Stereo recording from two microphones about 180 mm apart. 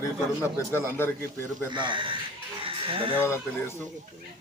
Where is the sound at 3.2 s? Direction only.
15° left (ahead or behind).